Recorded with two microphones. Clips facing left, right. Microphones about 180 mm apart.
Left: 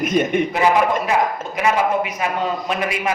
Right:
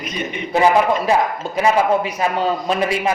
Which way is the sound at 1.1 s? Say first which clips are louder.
Right 2 dB; 30° right (ahead or behind).